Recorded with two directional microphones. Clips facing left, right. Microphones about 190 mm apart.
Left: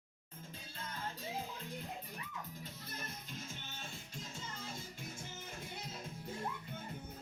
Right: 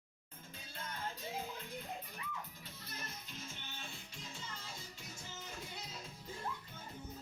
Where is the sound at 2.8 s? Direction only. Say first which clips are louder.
Right 2 dB; 50° left (ahead or behind).